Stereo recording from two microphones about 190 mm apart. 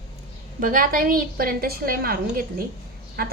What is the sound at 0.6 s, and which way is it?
A woman's voice, 45° right (ahead or behind).